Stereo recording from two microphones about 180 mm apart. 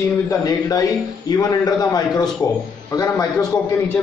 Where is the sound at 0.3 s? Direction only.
20° left (ahead or behind).